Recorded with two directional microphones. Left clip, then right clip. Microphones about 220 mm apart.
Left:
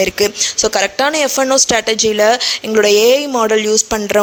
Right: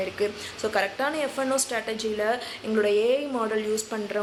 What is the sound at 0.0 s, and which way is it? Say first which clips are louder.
Speech: left 14 dB; 45° left (ahead or behind).